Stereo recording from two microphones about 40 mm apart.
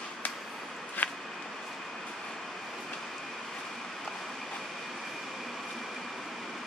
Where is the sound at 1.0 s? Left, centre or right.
Left.